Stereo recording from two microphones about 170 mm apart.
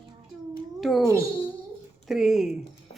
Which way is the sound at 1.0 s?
15° right (ahead or behind).